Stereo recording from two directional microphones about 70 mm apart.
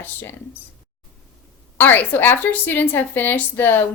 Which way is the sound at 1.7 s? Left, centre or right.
Left.